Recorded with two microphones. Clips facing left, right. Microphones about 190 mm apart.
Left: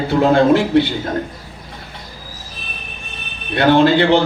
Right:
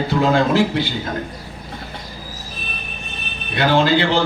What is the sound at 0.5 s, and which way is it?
Speech, 60° left (ahead or behind).